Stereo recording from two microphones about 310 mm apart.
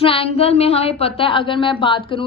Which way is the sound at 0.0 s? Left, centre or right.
Centre.